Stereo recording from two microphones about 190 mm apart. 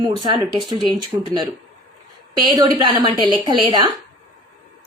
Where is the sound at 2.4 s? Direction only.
25° right (ahead or behind).